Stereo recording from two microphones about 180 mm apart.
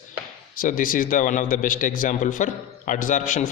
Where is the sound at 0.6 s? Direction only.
50° left (ahead or behind).